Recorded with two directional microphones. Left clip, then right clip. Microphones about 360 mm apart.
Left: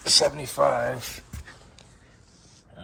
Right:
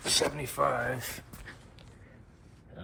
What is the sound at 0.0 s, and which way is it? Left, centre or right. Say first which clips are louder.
Speech: left 8 dB; centre.